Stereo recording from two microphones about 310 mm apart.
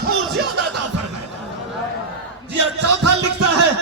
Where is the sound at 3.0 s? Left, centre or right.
Right.